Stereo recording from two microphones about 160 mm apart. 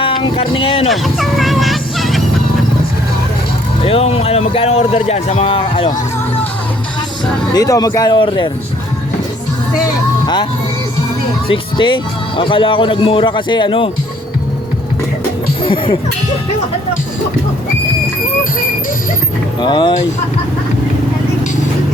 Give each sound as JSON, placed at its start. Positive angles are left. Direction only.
{"t": 0.0, "sound": "speech", "side_deg": 35}
{"t": 0.9, "sound": "speech", "side_deg": 0}
{"t": 3.8, "sound": "speech", "side_deg": 35}
{"t": 7.5, "sound": "speech", "side_deg": 20}
{"t": 11.4, "sound": "speech", "side_deg": 30}
{"t": 15.6, "sound": "speech", "side_deg": 35}
{"t": 19.6, "sound": "speech", "side_deg": 30}